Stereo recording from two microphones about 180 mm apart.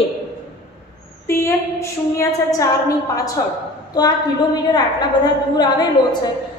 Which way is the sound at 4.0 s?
20° left (ahead or behind).